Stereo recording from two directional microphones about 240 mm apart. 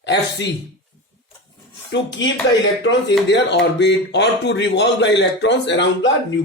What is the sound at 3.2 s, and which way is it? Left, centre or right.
Speech, left.